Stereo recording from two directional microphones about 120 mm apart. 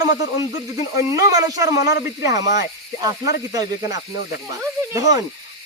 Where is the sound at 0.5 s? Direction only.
30° right (ahead or behind).